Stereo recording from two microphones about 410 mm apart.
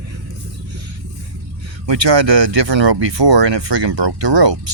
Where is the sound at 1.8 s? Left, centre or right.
Right.